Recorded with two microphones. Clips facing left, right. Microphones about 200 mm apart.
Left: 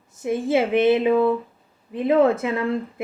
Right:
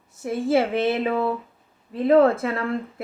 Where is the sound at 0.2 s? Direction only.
20° left (ahead or behind).